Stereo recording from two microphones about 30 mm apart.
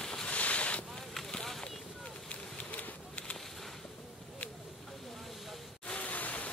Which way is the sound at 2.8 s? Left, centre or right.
Left.